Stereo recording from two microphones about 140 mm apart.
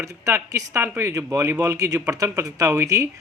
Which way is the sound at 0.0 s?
20° right (ahead or behind).